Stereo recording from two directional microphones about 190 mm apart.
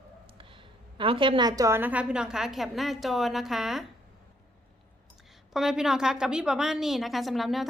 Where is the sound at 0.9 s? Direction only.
25° right (ahead or behind); by 3.8 s centre (ahead or behind).